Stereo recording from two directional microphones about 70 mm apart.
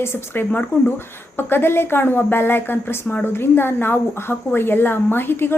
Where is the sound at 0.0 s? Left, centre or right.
Left.